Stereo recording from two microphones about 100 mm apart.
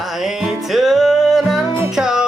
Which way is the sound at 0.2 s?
5° right (ahead or behind).